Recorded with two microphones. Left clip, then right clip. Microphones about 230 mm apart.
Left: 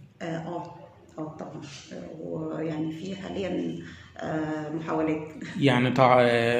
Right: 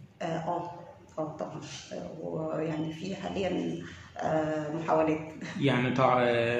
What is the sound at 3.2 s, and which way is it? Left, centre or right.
Speech, centre.